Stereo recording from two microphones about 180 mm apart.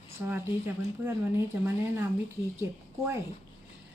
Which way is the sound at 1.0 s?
15° right (ahead or behind).